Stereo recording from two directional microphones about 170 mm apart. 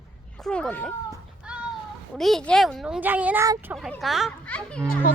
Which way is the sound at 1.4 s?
5° right (ahead or behind).